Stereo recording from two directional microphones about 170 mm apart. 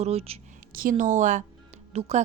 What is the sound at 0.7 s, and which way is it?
Speech, 55° right (ahead or behind).